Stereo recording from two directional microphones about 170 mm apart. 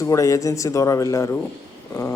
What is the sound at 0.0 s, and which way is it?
Speech, 20° left (ahead or behind).